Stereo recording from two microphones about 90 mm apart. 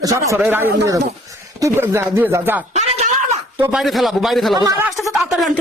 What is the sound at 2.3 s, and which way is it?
Speech, 30° right (ahead or behind).